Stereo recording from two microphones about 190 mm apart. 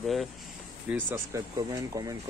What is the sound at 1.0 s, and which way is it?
Speech, 15° right (ahead or behind).